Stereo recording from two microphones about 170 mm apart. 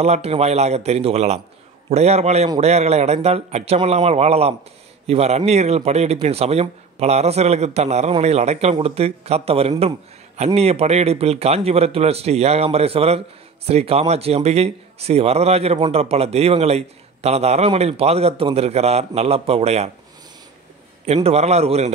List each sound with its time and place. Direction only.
0.0 s speech: 35° right (ahead or behind)
21.0 s speech: 35° right (ahead or behind)